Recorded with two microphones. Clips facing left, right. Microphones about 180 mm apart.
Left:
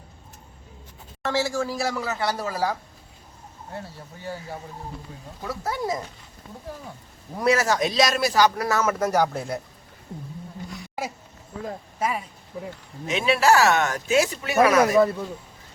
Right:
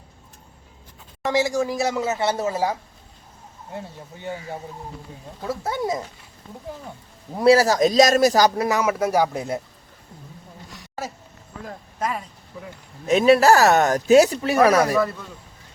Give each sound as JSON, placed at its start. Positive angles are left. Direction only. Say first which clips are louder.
{"t": 1.2, "sound": "speech", "louder": "right 4 dB", "side_deg": -15}
{"t": 5.4, "sound": "speech", "louder": "right 3 dB", "side_deg": -25}
{"t": 7.3, "sound": "speech", "louder": "right 6 dB", "side_deg": -30}
{"t": 8.5, "sound": "speech", "louder": "right 2 dB", "side_deg": -20}
{"t": 11.9, "sound": "speech", "louder": "even", "side_deg": 10}
{"t": 13.1, "sound": "speech", "louder": "right 6 dB", "side_deg": -40}